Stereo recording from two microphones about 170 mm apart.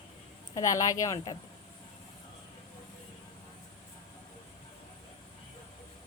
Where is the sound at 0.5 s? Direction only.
20° left (ahead or behind).